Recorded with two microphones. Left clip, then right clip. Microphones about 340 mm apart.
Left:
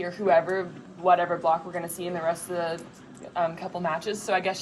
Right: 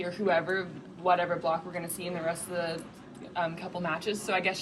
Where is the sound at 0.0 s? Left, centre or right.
Centre.